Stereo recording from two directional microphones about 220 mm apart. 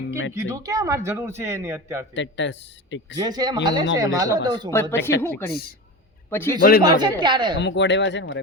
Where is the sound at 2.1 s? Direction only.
55° left (ahead or behind).